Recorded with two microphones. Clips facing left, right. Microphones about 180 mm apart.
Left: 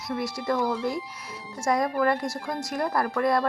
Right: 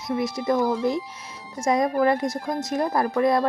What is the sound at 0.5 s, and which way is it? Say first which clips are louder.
Speech: right 4 dB; 45° right (ahead or behind).